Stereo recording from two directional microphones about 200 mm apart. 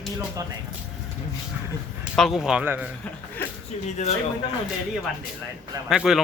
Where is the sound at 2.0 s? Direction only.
Centre (ahead or behind).